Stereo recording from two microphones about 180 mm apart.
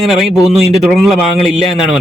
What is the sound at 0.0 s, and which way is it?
A man's voice, centre (ahead or behind).